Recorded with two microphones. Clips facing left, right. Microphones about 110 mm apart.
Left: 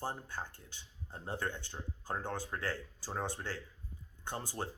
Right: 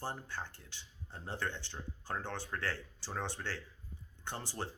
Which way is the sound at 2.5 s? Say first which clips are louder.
Right 2 dB; 25° left (ahead or behind).